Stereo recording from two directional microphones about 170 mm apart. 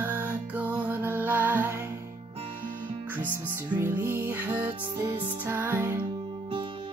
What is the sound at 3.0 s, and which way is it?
Music, 10° right (ahead or behind).